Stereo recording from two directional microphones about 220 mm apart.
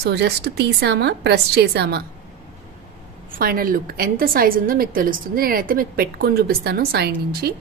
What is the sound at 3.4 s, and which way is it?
A woman's voice, 40° right (ahead or behind).